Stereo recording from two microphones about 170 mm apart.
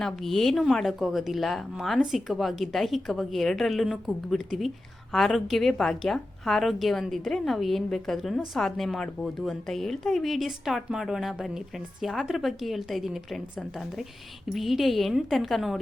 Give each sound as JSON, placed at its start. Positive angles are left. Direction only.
{"t": 0.0, "sound": "a woman's voice", "side_deg": 0}